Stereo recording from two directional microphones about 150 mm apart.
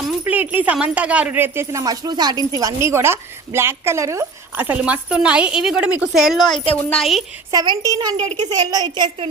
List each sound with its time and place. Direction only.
0.3 s a woman's voice: 10° right (ahead or behind)
7.5 s a woman's voice: 25° right (ahead or behind)
8.1 s a woman's voice: 45° right (ahead or behind)
8.4 s a woman's voice: 30° right (ahead or behind)